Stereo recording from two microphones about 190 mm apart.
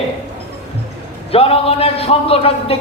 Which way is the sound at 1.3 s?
30° left (ahead or behind).